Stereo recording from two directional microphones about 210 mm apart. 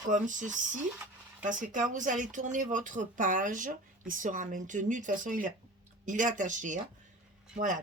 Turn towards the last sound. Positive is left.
turn(degrees=-40)  # may be behind; listen again after turning